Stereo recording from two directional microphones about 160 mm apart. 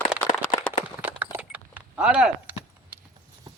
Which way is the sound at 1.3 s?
10° right (ahead or behind).